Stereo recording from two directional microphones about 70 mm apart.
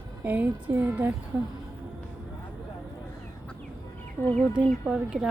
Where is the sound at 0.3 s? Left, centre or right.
Right.